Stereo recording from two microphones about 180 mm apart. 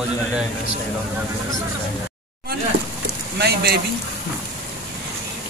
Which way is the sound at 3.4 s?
60° right (ahead or behind).